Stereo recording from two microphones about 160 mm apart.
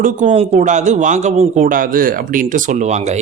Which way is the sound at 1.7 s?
60° right (ahead or behind).